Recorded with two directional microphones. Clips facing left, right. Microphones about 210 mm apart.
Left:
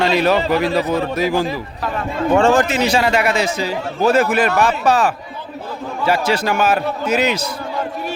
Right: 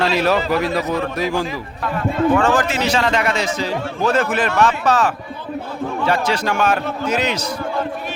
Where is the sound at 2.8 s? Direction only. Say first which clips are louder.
Left 2 dB; 10° left (ahead or behind).